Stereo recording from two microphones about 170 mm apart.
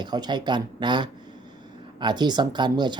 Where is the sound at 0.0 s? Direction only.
25° right (ahead or behind).